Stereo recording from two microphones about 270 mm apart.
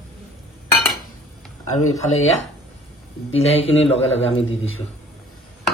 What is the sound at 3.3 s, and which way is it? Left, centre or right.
Speech, left.